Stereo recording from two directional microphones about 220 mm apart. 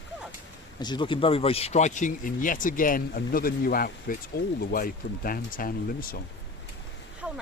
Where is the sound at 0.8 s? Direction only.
20° left (ahead or behind); by 6.2 s 40° left (ahead or behind).